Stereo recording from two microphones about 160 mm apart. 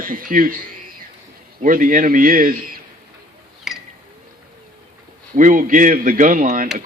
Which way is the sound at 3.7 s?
Centre (ahead or behind).